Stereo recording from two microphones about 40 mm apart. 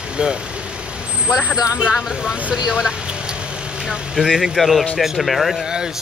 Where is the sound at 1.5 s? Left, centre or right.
Right.